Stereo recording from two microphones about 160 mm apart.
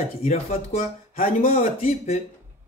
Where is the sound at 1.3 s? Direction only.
45° left (ahead or behind).